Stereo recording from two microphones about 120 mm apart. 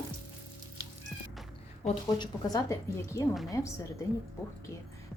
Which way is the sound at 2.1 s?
30° left (ahead or behind).